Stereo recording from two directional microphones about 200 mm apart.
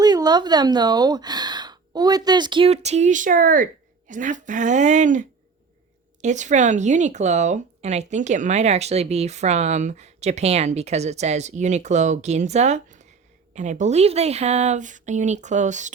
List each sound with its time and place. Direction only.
0.0 s speech: 20° right (ahead or behind); by 5.2 s 40° right (ahead or behind)
6.2 s speech: 35° right (ahead or behind)